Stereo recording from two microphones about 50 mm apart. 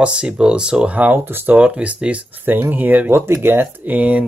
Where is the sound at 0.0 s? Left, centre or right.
Centre.